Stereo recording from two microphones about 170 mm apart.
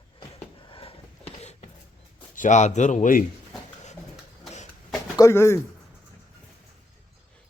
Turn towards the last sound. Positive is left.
turn(degrees=15)  # may be behind; listen again after turning